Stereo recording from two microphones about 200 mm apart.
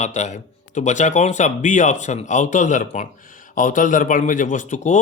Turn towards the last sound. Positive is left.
turn(degrees=35)  # may be behind; listen again after turning